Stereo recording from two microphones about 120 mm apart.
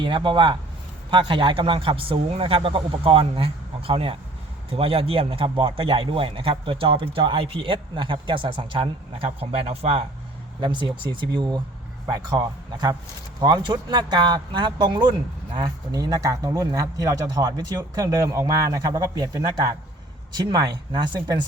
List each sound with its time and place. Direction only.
0.0 s a man's voice: 40° right (ahead or behind)
10.6 s speech: 40° right (ahead or behind)
20.3 s speech: 35° right (ahead or behind)